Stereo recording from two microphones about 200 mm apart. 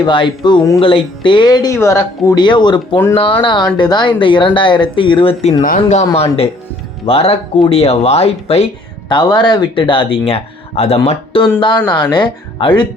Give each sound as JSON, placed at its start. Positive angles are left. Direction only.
{"t": 0.0, "sound": "speech", "side_deg": 25}
{"t": 7.0, "sound": "speech", "side_deg": 30}